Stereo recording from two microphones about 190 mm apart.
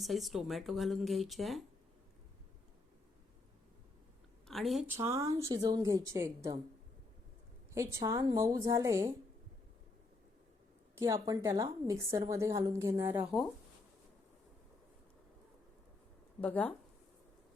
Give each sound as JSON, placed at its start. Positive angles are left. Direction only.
{"t": 0.0, "sound": "speech", "side_deg": 0}
{"t": 4.4, "sound": "speech", "side_deg": 0}
{"t": 4.9, "sound": "a woman's voice", "side_deg": -15}
{"t": 7.7, "sound": "a woman's voice", "side_deg": -15}
{"t": 10.9, "sound": "a woman's voice", "side_deg": -15}
{"t": 16.4, "sound": "speech", "side_deg": 5}